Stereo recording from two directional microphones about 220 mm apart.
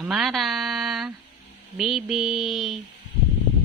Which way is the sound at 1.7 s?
Centre (ahead or behind).